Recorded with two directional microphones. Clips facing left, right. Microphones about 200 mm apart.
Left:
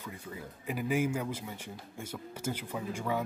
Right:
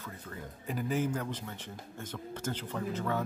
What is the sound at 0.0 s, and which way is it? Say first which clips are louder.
Speech: left 1 dB; 10° left (ahead or behind).